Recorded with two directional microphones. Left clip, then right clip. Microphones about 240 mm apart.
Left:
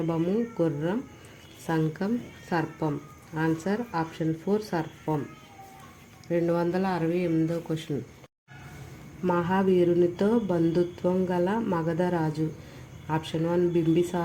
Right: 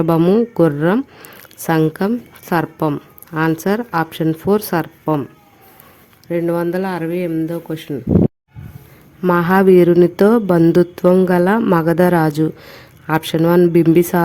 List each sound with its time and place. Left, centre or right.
0.1 s speech: right
6.2 s speech: right
9.2 s speech: right